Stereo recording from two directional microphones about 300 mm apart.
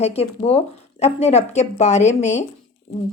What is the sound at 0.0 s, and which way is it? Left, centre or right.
A woman's voice, centre.